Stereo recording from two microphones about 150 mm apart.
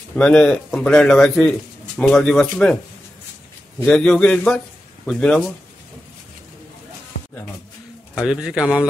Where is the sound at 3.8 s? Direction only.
5° left (ahead or behind).